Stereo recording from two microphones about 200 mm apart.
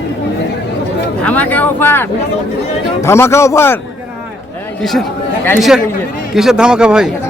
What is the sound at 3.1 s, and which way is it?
Speech, 15° left (ahead or behind).